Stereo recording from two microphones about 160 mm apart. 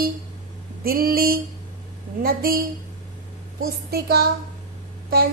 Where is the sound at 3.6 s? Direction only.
75° right (ahead or behind).